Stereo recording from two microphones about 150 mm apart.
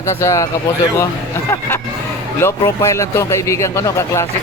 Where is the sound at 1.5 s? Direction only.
15° left (ahead or behind).